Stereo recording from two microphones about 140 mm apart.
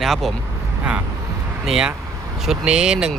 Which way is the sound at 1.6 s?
5° right (ahead or behind).